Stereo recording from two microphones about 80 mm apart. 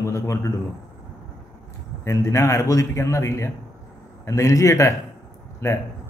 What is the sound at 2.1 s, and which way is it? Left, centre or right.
A man's voice, left.